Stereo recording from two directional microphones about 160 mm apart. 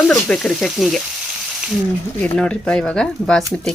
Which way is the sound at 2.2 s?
5° left (ahead or behind).